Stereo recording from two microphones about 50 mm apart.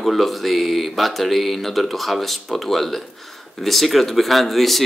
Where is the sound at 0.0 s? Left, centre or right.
Centre.